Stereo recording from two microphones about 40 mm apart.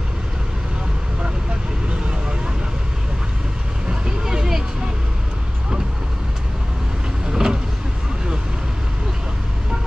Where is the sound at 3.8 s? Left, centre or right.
Centre.